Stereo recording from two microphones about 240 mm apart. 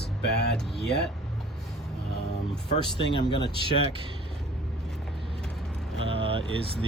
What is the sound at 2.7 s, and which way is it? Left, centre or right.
Speech, left.